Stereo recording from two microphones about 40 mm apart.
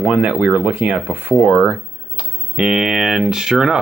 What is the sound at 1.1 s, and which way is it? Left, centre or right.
Speech, right.